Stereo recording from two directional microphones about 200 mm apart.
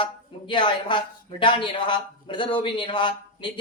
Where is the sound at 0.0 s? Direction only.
25° left (ahead or behind).